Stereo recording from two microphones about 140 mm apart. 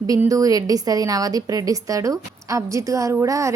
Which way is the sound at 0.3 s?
25° right (ahead or behind).